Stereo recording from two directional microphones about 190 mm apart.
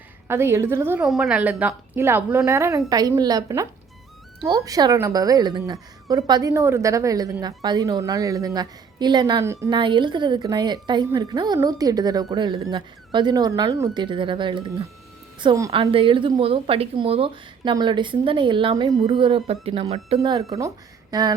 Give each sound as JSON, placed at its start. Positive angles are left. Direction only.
{"t": 0.3, "sound": "a woman's voice", "side_deg": -15}